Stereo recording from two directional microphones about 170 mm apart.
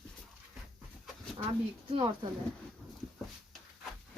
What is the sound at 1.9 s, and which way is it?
Speech, 30° right (ahead or behind).